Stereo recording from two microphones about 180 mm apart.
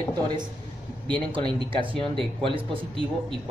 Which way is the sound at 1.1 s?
25° right (ahead or behind).